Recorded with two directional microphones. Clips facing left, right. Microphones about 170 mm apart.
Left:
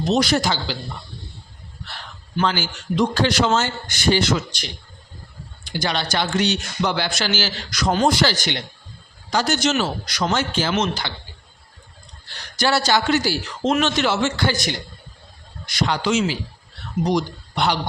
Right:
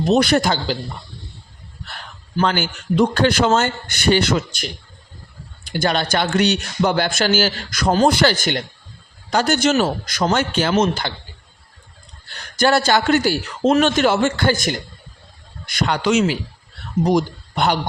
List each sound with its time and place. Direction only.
0.1 s speech: 60° right (ahead or behind)
1.9 s a man's voice: 45° right (ahead or behind)
5.7 s a man's voice: 50° right (ahead or behind)
8.0 s a man's voice: 55° right (ahead or behind)
12.3 s a man's voice: 50° right (ahead or behind)
17.0 s speech: 50° right (ahead or behind)